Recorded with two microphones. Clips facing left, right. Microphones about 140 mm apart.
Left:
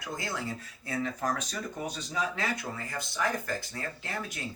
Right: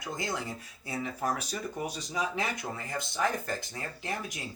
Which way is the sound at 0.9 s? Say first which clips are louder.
Left 1 dB; 10° right (ahead or behind).